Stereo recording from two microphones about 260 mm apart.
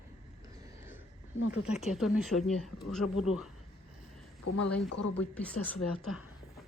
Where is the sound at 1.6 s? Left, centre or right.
Centre.